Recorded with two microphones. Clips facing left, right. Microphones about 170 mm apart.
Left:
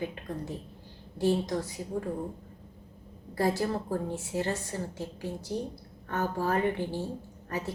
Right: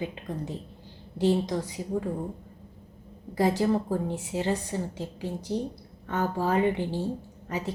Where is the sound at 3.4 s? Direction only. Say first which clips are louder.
Right 4 dB; 15° right (ahead or behind).